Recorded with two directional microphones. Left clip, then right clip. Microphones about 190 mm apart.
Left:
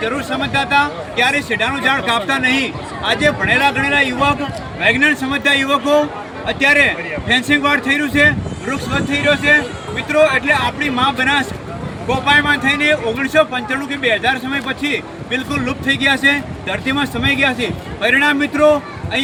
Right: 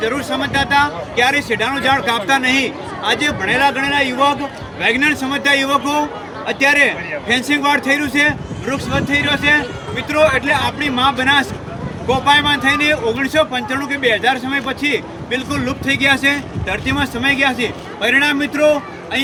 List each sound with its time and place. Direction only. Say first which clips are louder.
0.0 s a man's voice: right 1 dB; 20° right (ahead or behind)